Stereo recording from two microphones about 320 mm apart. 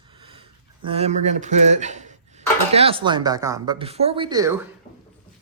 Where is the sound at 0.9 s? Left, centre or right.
Centre.